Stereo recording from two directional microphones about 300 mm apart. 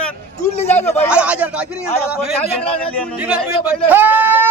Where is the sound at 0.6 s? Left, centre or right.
Left.